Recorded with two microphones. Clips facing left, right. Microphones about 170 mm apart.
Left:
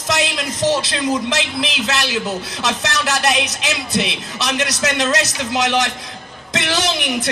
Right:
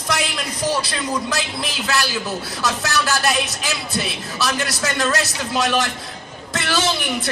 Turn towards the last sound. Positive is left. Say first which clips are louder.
# left 1 dB
turn(degrees=20)  # may be behind; listen again after turning